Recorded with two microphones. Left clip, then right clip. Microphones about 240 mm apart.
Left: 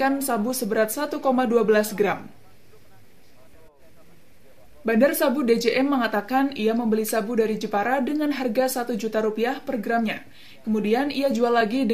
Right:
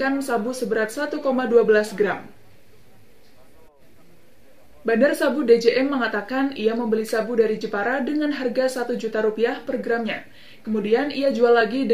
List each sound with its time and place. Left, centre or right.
0.0 s a woman's voice: left
4.8 s a woman's voice: left